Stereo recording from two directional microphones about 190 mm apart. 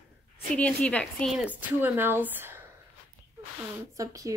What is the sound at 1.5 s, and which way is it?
A woman's voice, 10° right (ahead or behind).